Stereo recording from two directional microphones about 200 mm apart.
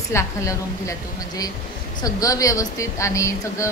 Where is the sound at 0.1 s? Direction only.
15° left (ahead or behind).